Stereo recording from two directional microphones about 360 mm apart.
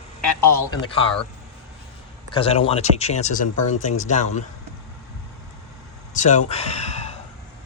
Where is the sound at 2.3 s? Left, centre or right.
Centre.